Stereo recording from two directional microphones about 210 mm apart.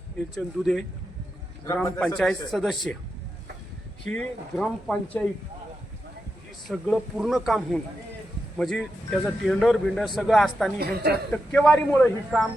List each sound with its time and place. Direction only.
0.3 s a man's voice: centre (ahead or behind)
4.0 s a man's voice: 5° left (ahead or behind)
6.7 s a man's voice: centre (ahead or behind)
10.8 s a woman's voice: 50° right (ahead or behind)
11.3 s a man's voice: 5° left (ahead or behind)